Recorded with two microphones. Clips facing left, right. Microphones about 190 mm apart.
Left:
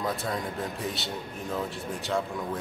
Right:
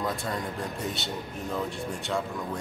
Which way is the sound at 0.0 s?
Centre (ahead or behind).